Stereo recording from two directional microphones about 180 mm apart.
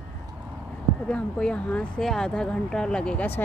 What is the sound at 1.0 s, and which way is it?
Speech, 5° left (ahead or behind).